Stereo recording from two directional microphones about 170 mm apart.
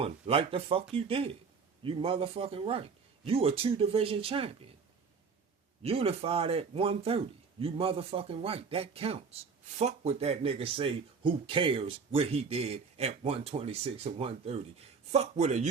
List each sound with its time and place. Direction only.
0.0 s speech: 35° right (ahead or behind)
5.8 s speech: 35° right (ahead or behind)